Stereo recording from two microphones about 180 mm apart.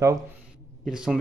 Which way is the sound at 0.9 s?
5° right (ahead or behind).